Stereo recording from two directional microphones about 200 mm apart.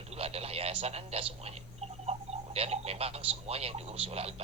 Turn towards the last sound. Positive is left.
turn(degrees=-30)  # may be behind; listen again after turning